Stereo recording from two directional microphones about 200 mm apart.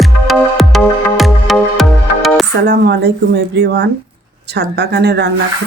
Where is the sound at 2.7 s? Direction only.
55° right (ahead or behind).